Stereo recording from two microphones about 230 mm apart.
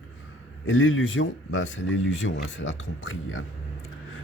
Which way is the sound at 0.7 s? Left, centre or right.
Left.